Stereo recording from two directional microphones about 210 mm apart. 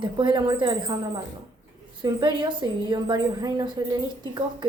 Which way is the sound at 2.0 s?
20° right (ahead or behind).